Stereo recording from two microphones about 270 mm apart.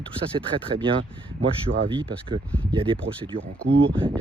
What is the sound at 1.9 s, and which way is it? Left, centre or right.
Speech, centre.